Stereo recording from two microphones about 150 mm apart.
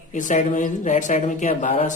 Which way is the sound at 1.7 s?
40° left (ahead or behind).